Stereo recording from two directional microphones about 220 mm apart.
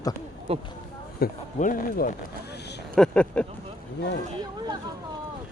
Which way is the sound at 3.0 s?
5° left (ahead or behind).